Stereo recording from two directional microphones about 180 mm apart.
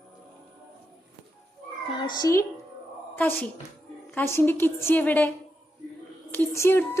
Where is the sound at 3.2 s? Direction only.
10° left (ahead or behind).